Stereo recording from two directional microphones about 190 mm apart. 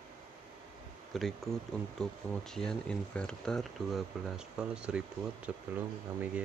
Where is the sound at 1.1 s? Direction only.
Centre (ahead or behind).